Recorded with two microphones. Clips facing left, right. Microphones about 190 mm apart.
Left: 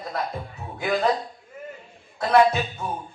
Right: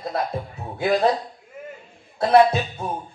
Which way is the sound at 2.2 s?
30° right (ahead or behind).